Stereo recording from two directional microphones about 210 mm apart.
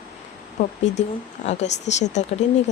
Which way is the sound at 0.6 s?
30° left (ahead or behind).